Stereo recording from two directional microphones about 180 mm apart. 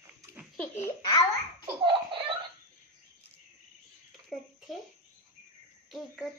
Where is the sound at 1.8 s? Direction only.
30° right (ahead or behind).